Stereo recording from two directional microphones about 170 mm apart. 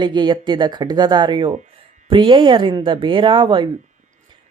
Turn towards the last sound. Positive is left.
turn(degrees=-30)  # may be behind; listen again after turning